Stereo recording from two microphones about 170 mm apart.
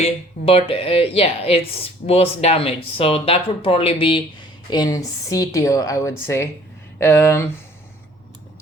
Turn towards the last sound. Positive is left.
turn(degrees=15)  # may be behind; listen again after turning